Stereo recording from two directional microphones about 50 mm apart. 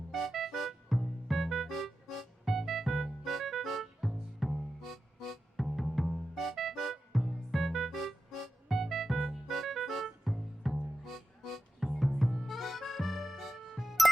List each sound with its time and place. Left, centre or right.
0.1 s music: centre